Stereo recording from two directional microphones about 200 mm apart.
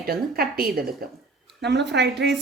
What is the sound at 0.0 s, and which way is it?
A woman's voice, 50° right (ahead or behind).